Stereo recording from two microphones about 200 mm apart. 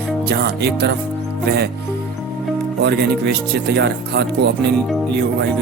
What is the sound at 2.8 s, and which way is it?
Speech, 55° right (ahead or behind).